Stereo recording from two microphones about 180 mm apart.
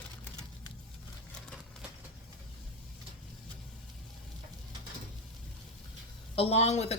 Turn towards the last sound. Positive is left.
turn(degrees=35)  # may be behind; listen again after turning